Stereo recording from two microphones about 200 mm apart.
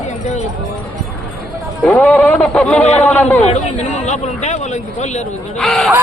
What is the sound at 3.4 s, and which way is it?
Speech, 35° left (ahead or behind).